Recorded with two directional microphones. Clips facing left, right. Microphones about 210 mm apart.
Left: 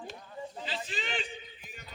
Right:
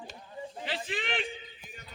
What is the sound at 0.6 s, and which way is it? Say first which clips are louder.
Speech: right 5 dB; 55° right (ahead or behind).